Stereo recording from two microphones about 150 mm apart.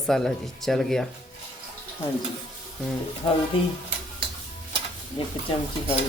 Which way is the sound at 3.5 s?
35° left (ahead or behind).